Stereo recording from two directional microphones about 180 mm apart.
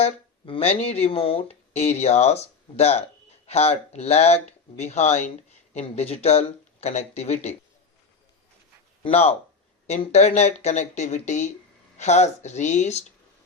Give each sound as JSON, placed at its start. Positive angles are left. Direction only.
{"t": 0.0, "sound": "speech", "side_deg": 35}
{"t": 9.0, "sound": "speech", "side_deg": 35}